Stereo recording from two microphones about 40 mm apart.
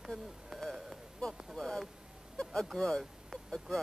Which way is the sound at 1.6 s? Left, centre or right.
Centre.